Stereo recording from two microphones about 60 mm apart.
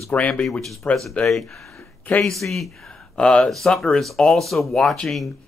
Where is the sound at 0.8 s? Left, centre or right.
Left.